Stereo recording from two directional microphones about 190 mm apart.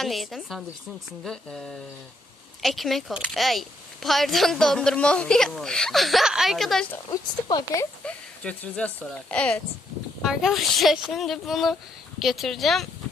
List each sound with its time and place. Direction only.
0.0 s speech: centre (ahead or behind)
7.4 s speech: 20° left (ahead or behind)
8.0 s speech: 5° left (ahead or behind)